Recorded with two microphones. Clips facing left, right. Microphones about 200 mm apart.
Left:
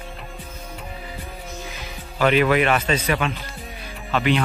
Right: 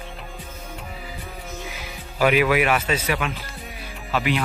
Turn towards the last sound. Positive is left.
turn(degrees=-5)  # may be behind; listen again after turning